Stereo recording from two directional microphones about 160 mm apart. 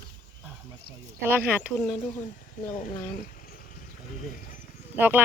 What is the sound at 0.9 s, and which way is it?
Speech, 75° right (ahead or behind).